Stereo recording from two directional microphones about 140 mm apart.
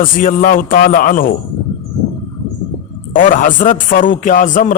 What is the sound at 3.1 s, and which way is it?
A man's voice, 70° left (ahead or behind).